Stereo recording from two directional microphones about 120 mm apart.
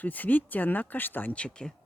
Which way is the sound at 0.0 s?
15° left (ahead or behind).